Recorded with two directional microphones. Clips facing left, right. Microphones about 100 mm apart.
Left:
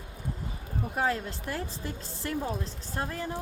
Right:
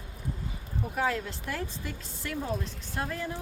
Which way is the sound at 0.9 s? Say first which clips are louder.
Left 1 dB; 35° left (ahead or behind).